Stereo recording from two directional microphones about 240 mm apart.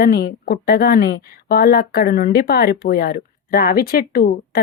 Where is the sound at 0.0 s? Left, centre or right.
Left.